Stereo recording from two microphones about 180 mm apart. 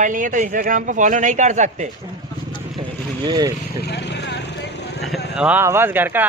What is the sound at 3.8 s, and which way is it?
Vehicle, 70° left (ahead or behind).